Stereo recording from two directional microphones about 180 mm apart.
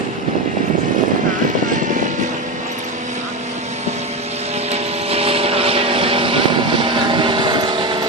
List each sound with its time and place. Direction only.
4.7 s vehicle: 35° right (ahead or behind)